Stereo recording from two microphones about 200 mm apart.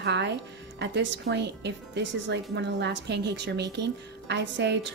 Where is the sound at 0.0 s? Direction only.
60° right (ahead or behind).